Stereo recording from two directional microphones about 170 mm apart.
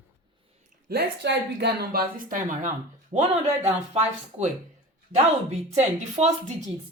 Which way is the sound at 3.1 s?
40° right (ahead or behind).